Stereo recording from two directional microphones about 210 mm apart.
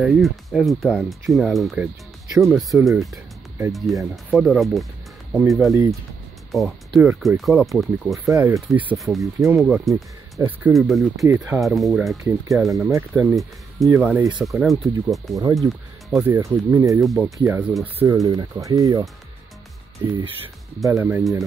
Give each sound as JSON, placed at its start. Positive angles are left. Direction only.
{"t": 0.0, "sound": "speech", "side_deg": 0}
{"t": 8.3, "sound": "speech", "side_deg": -15}
{"t": 8.9, "sound": "speech", "side_deg": 0}
{"t": 11.2, "sound": "speech", "side_deg": -10}
{"t": 12.2, "sound": "speech", "side_deg": -15}
{"t": 12.6, "sound": "speech", "side_deg": 0}
{"t": 16.2, "sound": "speech", "side_deg": -10}
{"t": 17.0, "sound": "speech", "side_deg": 0}
{"t": 20.8, "sound": "speech", "side_deg": -10}